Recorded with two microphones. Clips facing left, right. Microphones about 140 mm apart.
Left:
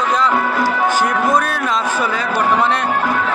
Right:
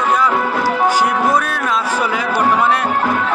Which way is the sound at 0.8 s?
10° right (ahead or behind).